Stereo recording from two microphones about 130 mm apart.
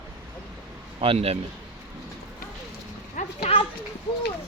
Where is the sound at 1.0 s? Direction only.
45° right (ahead or behind).